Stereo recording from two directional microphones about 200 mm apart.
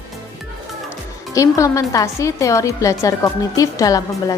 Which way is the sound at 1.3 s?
15° left (ahead or behind).